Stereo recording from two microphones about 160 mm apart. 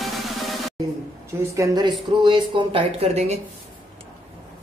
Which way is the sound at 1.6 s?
30° right (ahead or behind).